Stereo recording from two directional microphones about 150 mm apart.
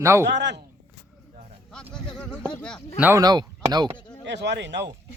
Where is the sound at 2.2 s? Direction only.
10° left (ahead or behind).